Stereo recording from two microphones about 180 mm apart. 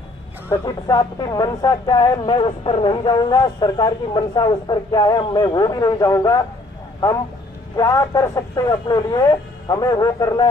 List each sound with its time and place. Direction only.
0.5 s speech: 20° left (ahead or behind)
7.7 s speech: 20° left (ahead or behind)